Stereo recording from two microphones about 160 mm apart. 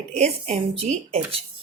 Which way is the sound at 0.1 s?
45° right (ahead or behind).